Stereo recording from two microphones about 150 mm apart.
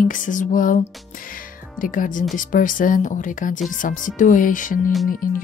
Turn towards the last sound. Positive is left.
turn(degrees=70)  # may be behind; listen again after turning